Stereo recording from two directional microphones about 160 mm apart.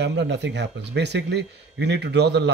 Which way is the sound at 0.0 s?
90° right.